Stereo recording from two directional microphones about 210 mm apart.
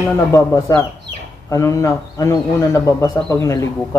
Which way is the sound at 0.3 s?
15° left (ahead or behind).